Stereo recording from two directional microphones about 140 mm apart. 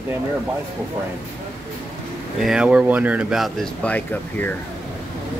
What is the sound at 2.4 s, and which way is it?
Speech, 5° right (ahead or behind).